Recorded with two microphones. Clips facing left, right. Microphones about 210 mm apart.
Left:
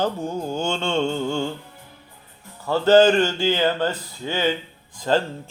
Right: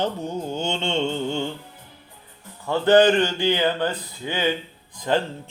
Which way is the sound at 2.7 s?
15° right (ahead or behind).